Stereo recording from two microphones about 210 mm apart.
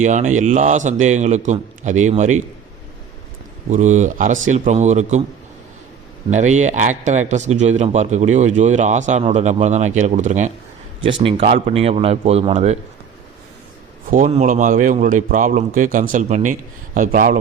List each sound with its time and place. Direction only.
0.0 s a man's voice: 35° right (ahead or behind)
3.7 s a man's voice: 35° right (ahead or behind)
6.3 s a man's voice: 35° right (ahead or behind)
14.1 s a man's voice: 35° right (ahead or behind)